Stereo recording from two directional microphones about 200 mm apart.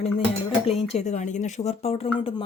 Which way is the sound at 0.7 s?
30° left (ahead or behind).